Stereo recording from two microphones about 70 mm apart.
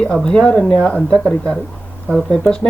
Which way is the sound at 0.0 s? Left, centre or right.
Centre.